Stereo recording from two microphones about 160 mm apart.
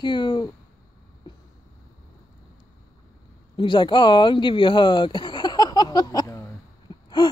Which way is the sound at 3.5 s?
30° left (ahead or behind).